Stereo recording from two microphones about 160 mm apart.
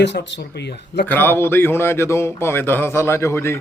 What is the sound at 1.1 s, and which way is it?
A man's voice, 15° left (ahead or behind).